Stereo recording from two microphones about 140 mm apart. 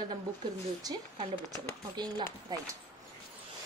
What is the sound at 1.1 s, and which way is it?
A woman's voice, 30° right (ahead or behind).